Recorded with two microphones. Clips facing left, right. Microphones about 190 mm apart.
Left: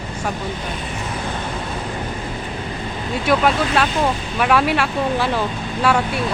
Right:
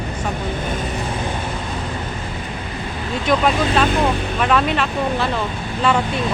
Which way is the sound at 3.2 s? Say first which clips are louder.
Even; 5° left (ahead or behind).